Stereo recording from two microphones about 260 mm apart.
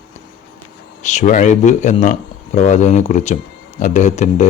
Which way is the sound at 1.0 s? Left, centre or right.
Left.